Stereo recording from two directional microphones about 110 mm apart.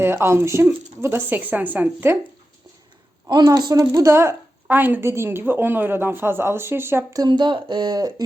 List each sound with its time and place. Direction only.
0.0 s a woman's voice: 20° right (ahead or behind)
3.2 s speech: 40° right (ahead or behind); by 7.0 s 20° right (ahead or behind)
7.1 s speech: 40° right (ahead or behind)